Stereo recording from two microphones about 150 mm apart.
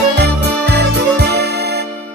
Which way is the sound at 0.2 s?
90° right.